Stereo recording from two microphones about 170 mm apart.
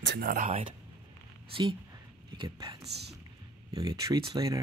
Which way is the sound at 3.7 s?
20° right (ahead or behind).